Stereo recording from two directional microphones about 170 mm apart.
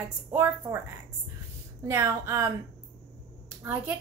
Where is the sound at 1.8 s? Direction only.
15° right (ahead or behind).